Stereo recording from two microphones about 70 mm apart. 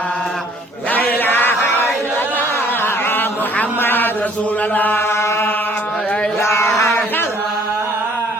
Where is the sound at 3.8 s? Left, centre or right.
Left.